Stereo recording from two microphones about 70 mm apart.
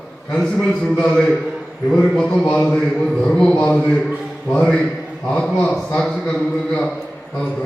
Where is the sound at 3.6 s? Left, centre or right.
Centre.